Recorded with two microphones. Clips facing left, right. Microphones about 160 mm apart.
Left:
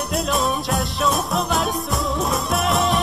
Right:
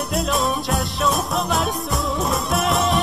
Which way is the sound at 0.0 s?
Centre (ahead or behind).